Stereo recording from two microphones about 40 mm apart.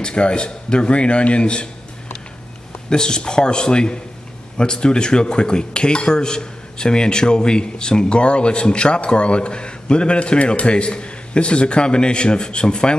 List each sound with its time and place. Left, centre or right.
0.0 s cutlery: left
2.9 s cutlery: centre